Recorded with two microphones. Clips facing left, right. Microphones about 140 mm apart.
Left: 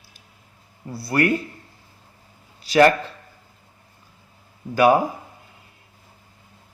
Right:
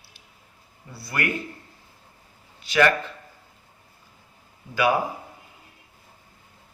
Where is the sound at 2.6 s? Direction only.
35° left (ahead or behind).